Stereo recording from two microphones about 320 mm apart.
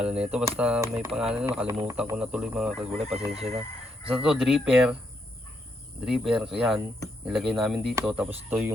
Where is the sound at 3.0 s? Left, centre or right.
Centre.